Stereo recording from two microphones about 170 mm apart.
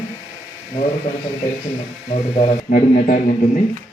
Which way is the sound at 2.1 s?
35° left (ahead or behind).